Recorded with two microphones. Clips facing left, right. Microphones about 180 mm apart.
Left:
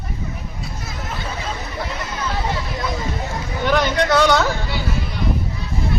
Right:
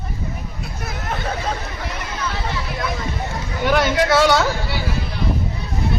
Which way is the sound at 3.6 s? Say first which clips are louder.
Right 1 dB; 5° right (ahead or behind).